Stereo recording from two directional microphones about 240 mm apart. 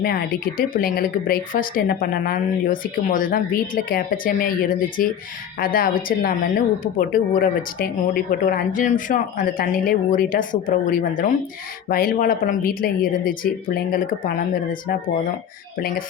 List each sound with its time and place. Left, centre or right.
0.0 s speech: left